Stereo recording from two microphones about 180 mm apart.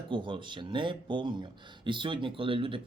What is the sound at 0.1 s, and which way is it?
Speech, 25° right (ahead or behind).